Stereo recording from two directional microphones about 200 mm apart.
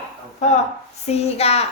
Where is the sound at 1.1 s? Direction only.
30° left (ahead or behind).